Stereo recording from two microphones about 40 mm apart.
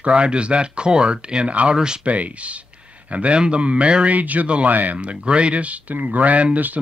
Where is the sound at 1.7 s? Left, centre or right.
Centre.